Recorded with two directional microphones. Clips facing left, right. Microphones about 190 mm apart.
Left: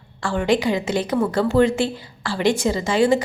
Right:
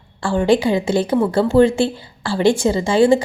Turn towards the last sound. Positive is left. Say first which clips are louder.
# right 4 dB
turn(degrees=-30)  # may be behind; listen again after turning